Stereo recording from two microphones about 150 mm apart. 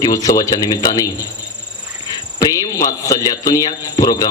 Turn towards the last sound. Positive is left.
turn(degrees=25)  # may be behind; listen again after turning